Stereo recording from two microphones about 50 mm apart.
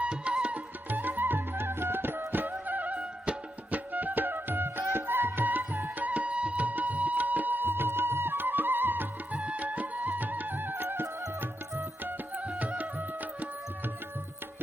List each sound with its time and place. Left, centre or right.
0.0 s music: right
0.9 s music: right
9.3 s music: right
12.0 s music: right